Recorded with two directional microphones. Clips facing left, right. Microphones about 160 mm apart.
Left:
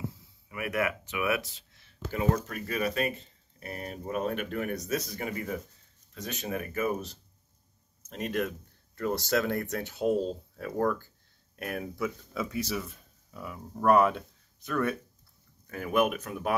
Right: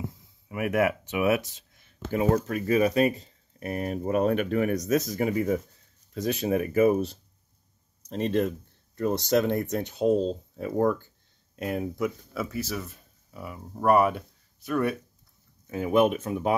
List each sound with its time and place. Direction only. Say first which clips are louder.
0.5 s speech: right 6 dB; 30° right (ahead or behind)
2.1 s speech: right 5 dB; 35° right (ahead or behind); by 12.1 s 20° right (ahead or behind)
12.4 s speech: even; 5° right (ahead or behind)
15.6 s speech: right 5 dB; 20° right (ahead or behind)